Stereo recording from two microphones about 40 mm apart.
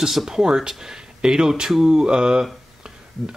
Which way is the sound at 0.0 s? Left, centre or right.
Centre.